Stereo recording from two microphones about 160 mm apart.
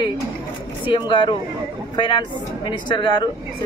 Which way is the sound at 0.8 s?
30° left (ahead or behind).